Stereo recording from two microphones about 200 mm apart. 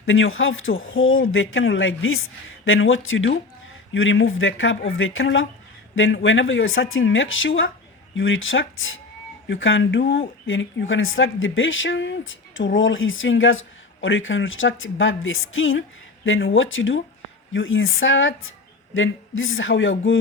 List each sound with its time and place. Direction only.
0.0 s speech: 80° left